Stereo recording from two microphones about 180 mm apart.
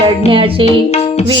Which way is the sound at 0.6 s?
35° left (ahead or behind).